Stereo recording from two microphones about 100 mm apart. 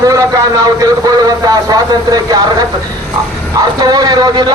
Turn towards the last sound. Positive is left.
turn(degrees=-40)  # may be behind; listen again after turning